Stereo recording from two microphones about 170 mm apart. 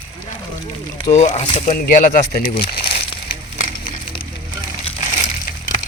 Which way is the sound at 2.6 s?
65° left (ahead or behind).